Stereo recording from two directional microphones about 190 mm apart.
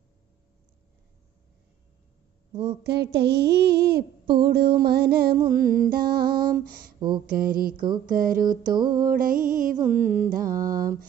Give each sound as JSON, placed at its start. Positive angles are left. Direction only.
{"t": 2.5, "sound": "a woman's voice", "side_deg": -30}
{"t": 2.8, "sound": "speech", "side_deg": -60}
{"t": 4.4, "sound": "music", "side_deg": -55}